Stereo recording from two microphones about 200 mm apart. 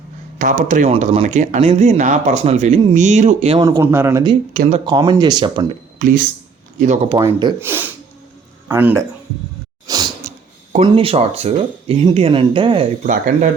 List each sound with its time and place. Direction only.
0.3 s speech: 40° right (ahead or behind)
3.6 s speech: 15° right (ahead or behind)
4.5 s speech: 40° right (ahead or behind)
4.9 s speech: 20° right (ahead or behind)
6.0 s speech: 40° right (ahead or behind)
7.2 s speech: 20° right (ahead or behind)
9.8 s sneeze: 20° right (ahead or behind)
10.2 s speech: 35° right (ahead or behind)
13.1 s speech: 40° right (ahead or behind)